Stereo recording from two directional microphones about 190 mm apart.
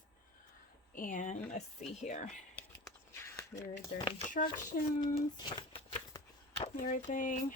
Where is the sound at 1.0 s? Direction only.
45° left (ahead or behind).